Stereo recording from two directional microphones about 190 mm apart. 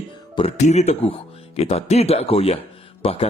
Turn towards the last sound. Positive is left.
turn(degrees=30)  # may be behind; listen again after turning